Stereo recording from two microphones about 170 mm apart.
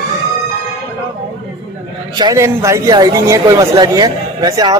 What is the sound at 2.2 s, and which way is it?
A man's voice, 20° right (ahead or behind).